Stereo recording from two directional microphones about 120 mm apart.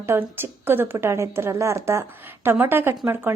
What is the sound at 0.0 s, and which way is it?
Speech, 20° right (ahead or behind).